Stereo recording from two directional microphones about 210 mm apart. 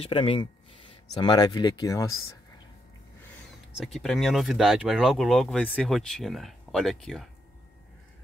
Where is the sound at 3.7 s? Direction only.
Centre (ahead or behind).